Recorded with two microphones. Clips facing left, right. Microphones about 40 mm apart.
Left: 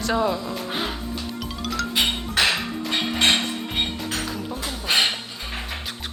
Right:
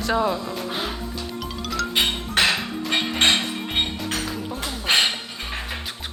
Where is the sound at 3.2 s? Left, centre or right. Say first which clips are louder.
Even; right.